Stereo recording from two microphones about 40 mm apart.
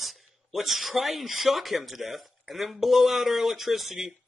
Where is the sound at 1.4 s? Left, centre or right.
Centre.